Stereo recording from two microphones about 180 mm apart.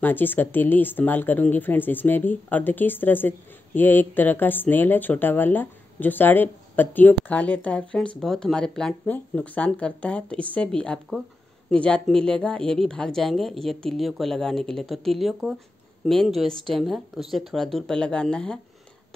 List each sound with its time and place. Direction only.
0.0 s a woman's voice: 10° left (ahead or behind)